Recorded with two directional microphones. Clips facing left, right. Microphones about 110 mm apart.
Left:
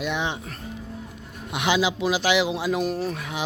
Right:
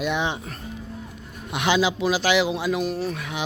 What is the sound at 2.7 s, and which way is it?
Speech, 40° left (ahead or behind).